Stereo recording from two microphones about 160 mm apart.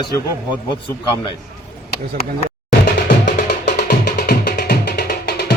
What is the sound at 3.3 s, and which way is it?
Music, 75° left (ahead or behind).